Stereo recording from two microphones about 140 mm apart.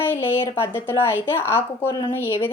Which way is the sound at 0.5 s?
15° left (ahead or behind).